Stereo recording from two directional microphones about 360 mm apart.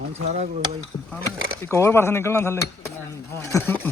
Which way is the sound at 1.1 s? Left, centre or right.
Centre.